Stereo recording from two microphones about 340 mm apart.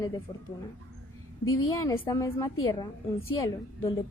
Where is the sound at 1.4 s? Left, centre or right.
Left.